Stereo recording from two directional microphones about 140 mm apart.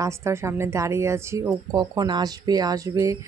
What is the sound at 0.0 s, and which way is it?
Speech, 20° right (ahead or behind).